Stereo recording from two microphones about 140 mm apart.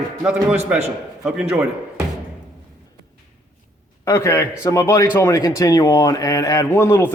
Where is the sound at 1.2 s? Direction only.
5° right (ahead or behind).